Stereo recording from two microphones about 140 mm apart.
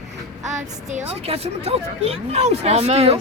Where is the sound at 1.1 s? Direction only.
45° right (ahead or behind).